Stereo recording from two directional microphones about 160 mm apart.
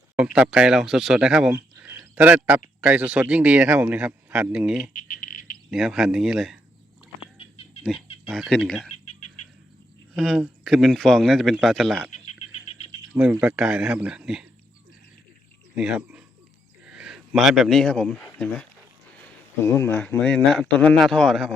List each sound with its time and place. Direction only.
0.2 s speech: 5° right (ahead or behind)
1.5 s a sound: 15° right (ahead or behind)
2.8 s a man's voice: 10° right (ahead or behind)
4.9 s bird: 60° left (ahead or behind)
5.7 s speech: centre (ahead or behind)
7.3 s goat: 40° left (ahead or behind)
8.4 s speech: 5° left (ahead or behind)
10.2 s speech: centre (ahead or behind)
12.2 s frog: 45° left (ahead or behind)
13.4 s speech: 5° right (ahead or behind)
15.7 s speech: 5° right (ahead or behind)
19.6 s speech: 15° left (ahead or behind)
20.2 s speech: centre (ahead or behind)